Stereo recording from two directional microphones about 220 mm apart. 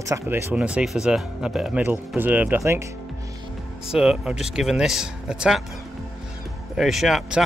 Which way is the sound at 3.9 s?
Centre (ahead or behind).